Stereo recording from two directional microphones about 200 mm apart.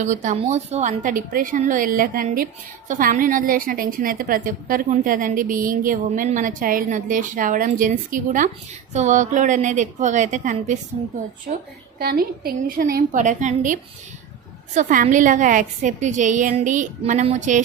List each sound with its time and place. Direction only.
0.0 s a woman's voice: 35° right (ahead or behind)
11.9 s a woman's voice: 50° right (ahead or behind)